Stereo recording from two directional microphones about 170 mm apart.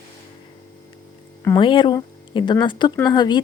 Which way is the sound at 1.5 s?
30° left (ahead or behind).